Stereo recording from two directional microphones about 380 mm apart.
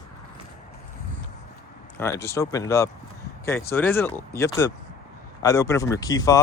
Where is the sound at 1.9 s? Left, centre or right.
Centre.